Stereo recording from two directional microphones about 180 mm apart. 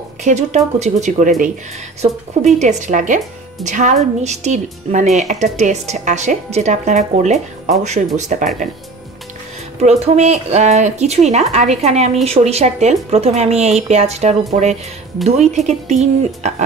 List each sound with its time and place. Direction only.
0.2 s a woman's voice: 40° right (ahead or behind)
9.8 s a woman's voice: 35° right (ahead or behind)